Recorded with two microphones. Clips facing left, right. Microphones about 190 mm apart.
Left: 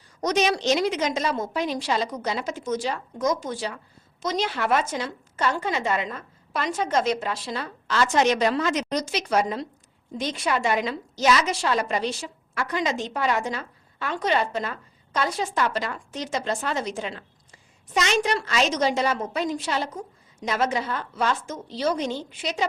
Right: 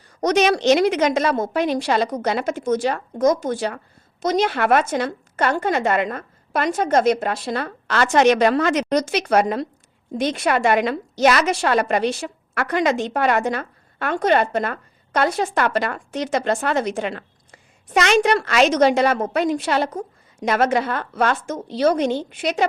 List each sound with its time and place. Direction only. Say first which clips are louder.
0.2 s a woman's voice: right 5 dB; 65° right (ahead or behind)